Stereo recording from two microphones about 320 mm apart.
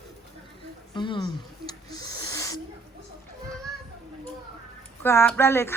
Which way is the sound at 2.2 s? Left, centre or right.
Centre.